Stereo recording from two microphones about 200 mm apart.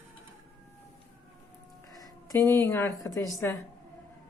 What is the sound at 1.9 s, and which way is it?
A woman's voice, 15° left (ahead or behind).